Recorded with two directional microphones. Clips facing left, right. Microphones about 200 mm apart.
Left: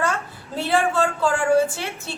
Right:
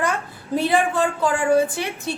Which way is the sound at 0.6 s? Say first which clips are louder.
Right 1 dB; 15° right (ahead or behind).